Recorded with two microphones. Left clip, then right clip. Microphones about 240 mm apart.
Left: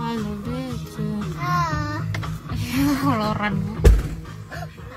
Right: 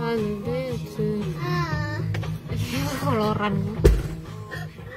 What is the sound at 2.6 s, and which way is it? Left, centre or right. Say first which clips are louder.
Speech: left 6 dB; centre.